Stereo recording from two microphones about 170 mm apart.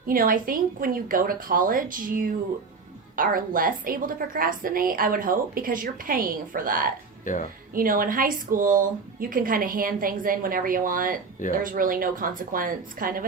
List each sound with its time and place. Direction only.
0.1 s a woman's voice: 55° right (ahead or behind)
7.3 s speech: 55° left (ahead or behind)
7.7 s a woman's voice: 55° right (ahead or behind)